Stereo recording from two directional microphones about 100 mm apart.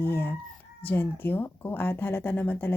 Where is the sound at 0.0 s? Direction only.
20° left (ahead or behind).